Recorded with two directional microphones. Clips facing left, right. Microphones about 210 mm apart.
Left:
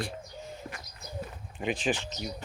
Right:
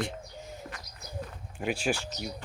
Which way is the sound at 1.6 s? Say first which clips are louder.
Even; 10° right (ahead or behind).